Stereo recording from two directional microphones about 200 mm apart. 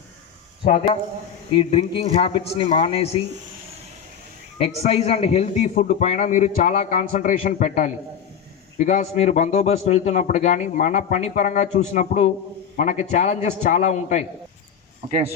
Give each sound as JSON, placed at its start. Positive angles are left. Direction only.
{"t": 0.6, "sound": "speech", "side_deg": 45}
{"t": 1.5, "sound": "a man's voice", "side_deg": 25}
{"t": 4.5, "sound": "a man's voice", "side_deg": 30}